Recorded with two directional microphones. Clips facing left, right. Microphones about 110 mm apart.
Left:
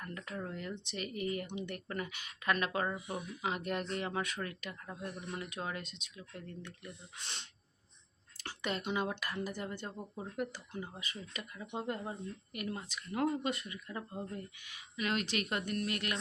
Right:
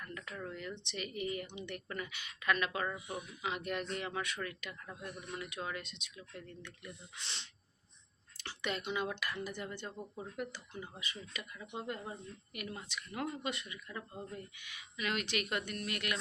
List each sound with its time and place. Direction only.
0.0 s speech: 35° left (ahead or behind)
8.4 s a sound: 40° left (ahead or behind)
9.0 s speech: 40° left (ahead or behind)